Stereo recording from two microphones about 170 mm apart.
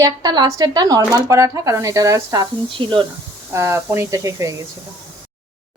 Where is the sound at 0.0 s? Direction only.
25° right (ahead or behind).